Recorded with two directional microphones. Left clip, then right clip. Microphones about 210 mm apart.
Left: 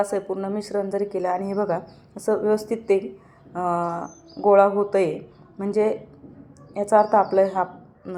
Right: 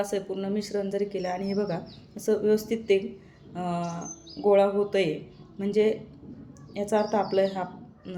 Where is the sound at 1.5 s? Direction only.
5° right (ahead or behind).